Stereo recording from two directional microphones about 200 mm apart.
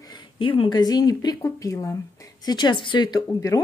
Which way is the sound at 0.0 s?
20° left (ahead or behind).